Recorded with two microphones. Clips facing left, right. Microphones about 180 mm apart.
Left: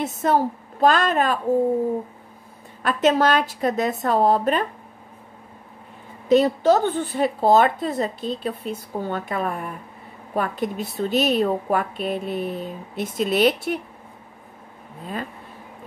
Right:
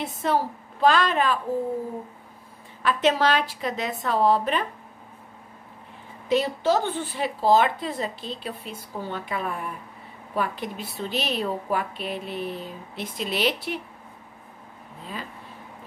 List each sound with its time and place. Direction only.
0.0 s a woman's voice: 45° left (ahead or behind)
2.8 s a woman's voice: 45° left (ahead or behind)
6.2 s a woman's voice: 40° left (ahead or behind)